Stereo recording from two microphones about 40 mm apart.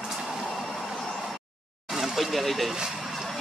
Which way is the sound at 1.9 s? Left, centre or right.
Centre.